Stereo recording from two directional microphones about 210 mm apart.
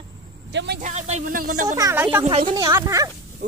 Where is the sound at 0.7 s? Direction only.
35° right (ahead or behind).